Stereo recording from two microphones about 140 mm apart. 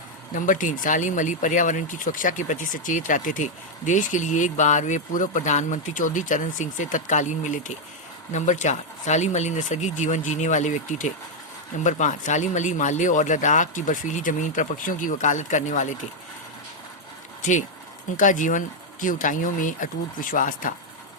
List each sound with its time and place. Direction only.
0.3 s speech: 70° left (ahead or behind)
17.4 s speech: 60° left (ahead or behind)